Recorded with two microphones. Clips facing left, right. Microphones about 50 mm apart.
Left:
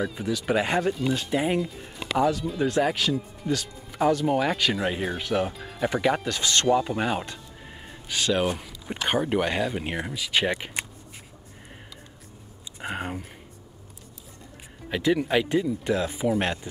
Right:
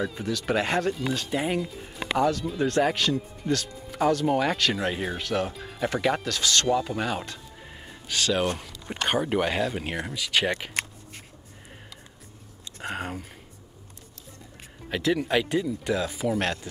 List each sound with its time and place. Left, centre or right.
0.0 s speech: centre
6.2 s speech: centre
7.6 s speech: centre
12.7 s speech: centre
14.9 s speech: centre